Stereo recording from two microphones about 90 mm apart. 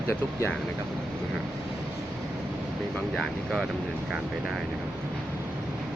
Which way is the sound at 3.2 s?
5° right (ahead or behind).